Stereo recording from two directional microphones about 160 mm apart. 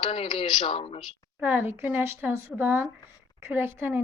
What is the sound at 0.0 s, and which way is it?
Speech, 30° left (ahead or behind).